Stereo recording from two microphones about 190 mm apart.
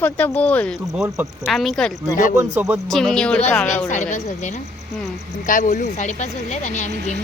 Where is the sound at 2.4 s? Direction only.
10° right (ahead or behind).